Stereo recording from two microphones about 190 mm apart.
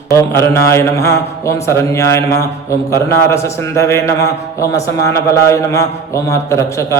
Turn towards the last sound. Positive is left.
turn(degrees=15)  # may be behind; listen again after turning